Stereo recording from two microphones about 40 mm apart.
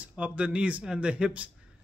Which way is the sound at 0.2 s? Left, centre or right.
Right.